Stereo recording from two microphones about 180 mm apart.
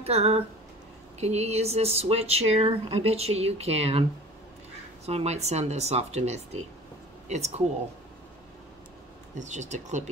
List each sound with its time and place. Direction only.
0.0 s speech: 35° right (ahead or behind)
5.0 s speech: 35° right (ahead or behind)
9.4 s speech: 40° right (ahead or behind)